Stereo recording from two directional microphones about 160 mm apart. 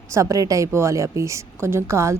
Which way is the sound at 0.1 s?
20° right (ahead or behind).